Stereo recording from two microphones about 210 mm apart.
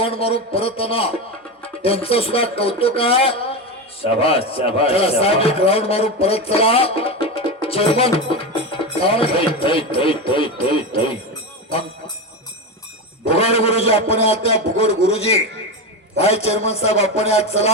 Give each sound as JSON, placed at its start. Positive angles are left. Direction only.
{"t": 0.0, "sound": "a man's voice", "side_deg": 25}
{"t": 13.2, "sound": "a man's voice", "side_deg": 30}